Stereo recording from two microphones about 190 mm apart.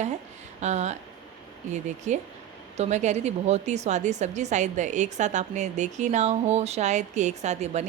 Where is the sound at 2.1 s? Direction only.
40° right (ahead or behind).